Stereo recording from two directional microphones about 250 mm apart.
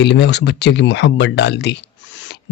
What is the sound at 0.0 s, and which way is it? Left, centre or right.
Speech, left.